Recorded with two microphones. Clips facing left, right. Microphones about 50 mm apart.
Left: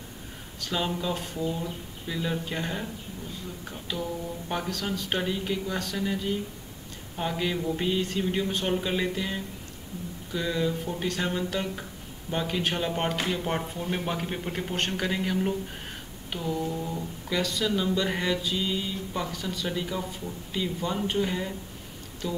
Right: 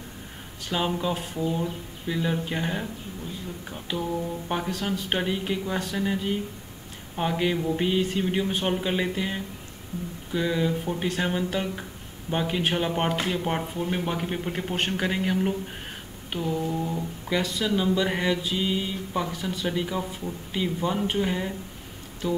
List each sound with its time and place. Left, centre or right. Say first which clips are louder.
0.7 s speech: right 3 dB; right
3.9 s speech: right 4 dB; centre